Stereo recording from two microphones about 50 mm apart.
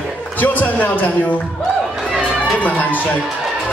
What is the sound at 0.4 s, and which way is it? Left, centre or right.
Speech, left.